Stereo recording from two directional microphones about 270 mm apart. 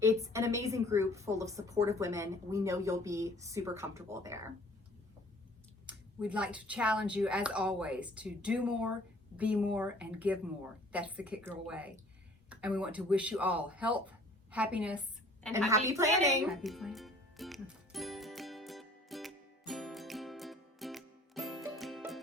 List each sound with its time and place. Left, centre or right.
0.0 s a woman's voice: centre
5.8 s a woman's voice: centre
16.3 s music: centre